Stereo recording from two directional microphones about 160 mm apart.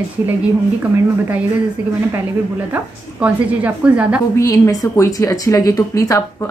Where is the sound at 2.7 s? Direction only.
10° right (ahead or behind).